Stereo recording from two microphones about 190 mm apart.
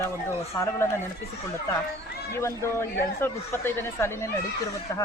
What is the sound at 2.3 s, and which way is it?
Speech, 15° left (ahead or behind).